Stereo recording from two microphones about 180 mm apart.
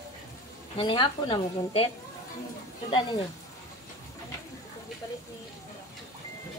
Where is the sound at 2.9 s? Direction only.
25° left (ahead or behind).